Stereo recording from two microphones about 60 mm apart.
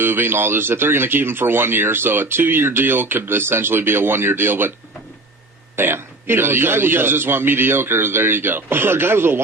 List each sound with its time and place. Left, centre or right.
0.0 s speech: right
5.7 s speech: right